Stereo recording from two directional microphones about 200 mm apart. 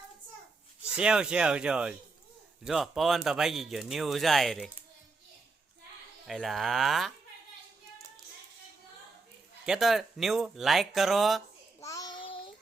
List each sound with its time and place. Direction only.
0.8 s speech: 5° right (ahead or behind)
6.2 s speech: centre (ahead or behind)
9.6 s speech: centre (ahead or behind)
11.8 s child singing: 15° left (ahead or behind)